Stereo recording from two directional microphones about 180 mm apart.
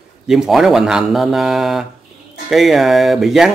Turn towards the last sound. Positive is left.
turn(degrees=0)  # may be behind; listen again after turning